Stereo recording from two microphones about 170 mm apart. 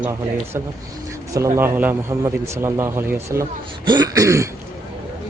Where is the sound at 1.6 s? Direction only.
10° right (ahead or behind).